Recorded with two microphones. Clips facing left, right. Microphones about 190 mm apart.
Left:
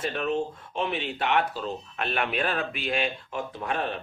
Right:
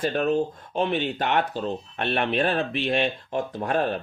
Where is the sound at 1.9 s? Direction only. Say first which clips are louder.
Right 4 dB; 35° right (ahead or behind).